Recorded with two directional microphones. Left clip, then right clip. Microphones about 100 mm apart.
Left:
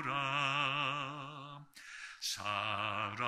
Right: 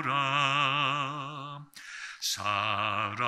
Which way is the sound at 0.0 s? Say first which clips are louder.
Right 8 dB; 20° right (ahead or behind).